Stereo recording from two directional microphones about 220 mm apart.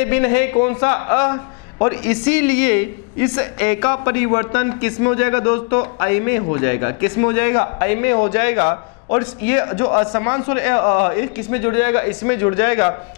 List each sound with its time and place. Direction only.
0.1 s a man's voice: 15° left (ahead or behind)